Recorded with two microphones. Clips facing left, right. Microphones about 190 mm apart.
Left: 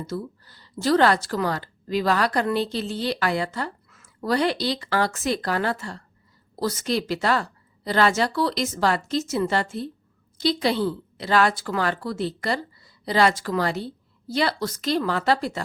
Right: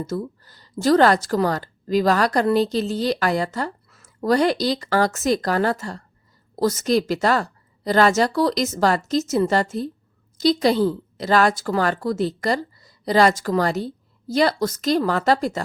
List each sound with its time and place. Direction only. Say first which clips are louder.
0.1 s a woman's voice: right 4 dB; 45° right (ahead or behind)